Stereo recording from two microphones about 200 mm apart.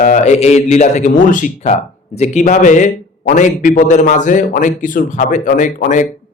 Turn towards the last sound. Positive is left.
turn(degrees=40)  # may be behind; listen again after turning